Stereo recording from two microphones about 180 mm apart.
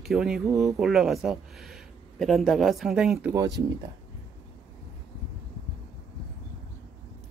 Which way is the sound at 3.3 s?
20° right (ahead or behind).